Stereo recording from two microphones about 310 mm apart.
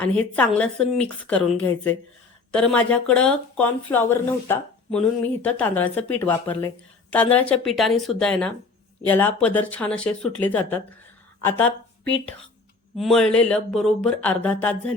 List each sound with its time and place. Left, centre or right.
0.2 s a woman's voice: centre
12.0 s speech: left
13.0 s speech: centre